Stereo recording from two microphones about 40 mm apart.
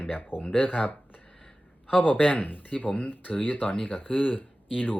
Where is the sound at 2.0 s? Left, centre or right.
Left.